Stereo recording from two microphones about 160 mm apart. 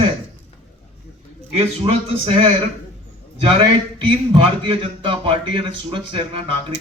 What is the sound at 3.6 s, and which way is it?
A man's voice, 30° right (ahead or behind).